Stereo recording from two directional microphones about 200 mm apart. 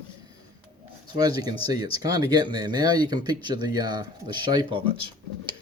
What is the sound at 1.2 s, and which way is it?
Speech, 20° right (ahead or behind).